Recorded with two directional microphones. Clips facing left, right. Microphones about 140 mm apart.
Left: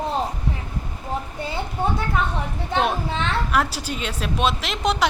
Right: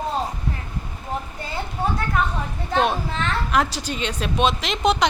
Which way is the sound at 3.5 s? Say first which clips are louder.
Right 1 dB; 5° left (ahead or behind).